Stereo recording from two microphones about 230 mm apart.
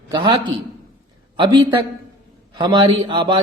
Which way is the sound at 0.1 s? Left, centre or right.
Centre.